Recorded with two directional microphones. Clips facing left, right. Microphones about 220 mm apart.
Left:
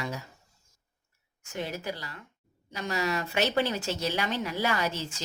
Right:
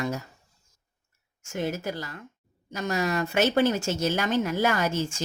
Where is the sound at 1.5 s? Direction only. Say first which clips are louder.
Right 5 dB; 45° right (ahead or behind).